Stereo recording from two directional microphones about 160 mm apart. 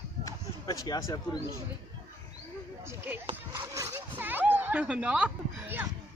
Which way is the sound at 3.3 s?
15° right (ahead or behind).